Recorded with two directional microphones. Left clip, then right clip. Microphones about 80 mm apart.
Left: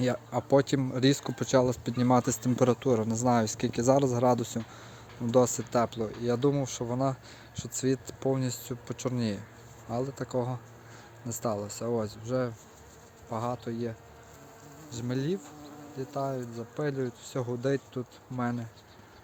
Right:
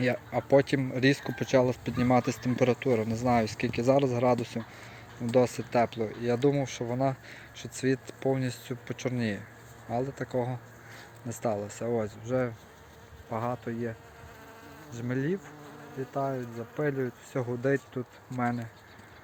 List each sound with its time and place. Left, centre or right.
0.0 s speech: left
2.2 s speech: left
2.9 s speech: left
5.3 s speech: left; by 13.9 s centre
14.9 s speech: centre
16.6 s speech: centre